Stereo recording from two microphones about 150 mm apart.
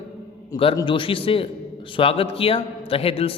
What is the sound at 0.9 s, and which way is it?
A man's voice, 35° left (ahead or behind).